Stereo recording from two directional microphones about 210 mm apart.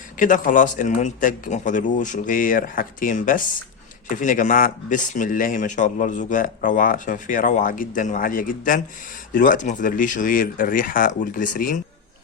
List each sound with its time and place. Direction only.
0.2 s speech: 40° left (ahead or behind)